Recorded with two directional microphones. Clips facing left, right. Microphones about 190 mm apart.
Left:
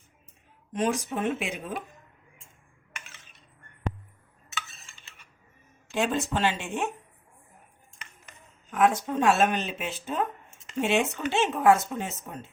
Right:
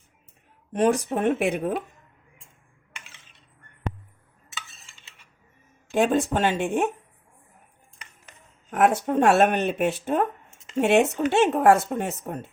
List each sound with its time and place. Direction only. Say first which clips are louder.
0.7 s speech: right 6 dB; 60° right (ahead or behind)
5.9 s speech: right 6 dB; 50° right (ahead or behind)
8.7 s speech: right 3 dB; 65° right (ahead or behind)